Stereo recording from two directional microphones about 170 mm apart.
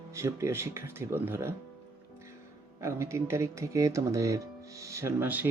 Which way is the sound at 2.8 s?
15° right (ahead or behind).